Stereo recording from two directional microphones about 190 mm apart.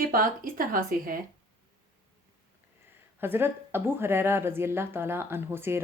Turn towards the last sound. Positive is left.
turn(degrees=-10)  # may be behind; listen again after turning